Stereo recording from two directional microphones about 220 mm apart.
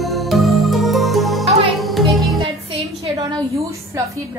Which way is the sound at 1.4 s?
30° right (ahead or behind).